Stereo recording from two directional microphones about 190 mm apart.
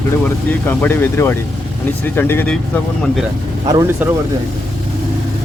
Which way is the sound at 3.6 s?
20° right (ahead or behind).